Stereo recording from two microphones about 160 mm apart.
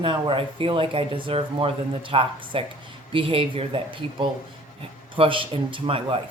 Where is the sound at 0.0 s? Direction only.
30° right (ahead or behind).